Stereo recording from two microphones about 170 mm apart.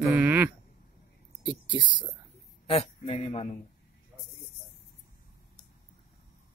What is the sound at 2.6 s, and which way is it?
Speech, 35° left (ahead or behind).